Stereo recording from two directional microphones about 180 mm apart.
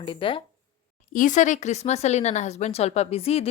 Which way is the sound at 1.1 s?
45° left (ahead or behind).